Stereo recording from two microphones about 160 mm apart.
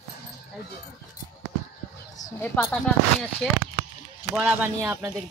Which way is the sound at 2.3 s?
15° left (ahead or behind).